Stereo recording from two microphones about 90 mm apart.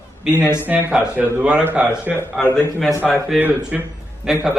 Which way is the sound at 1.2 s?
15° right (ahead or behind).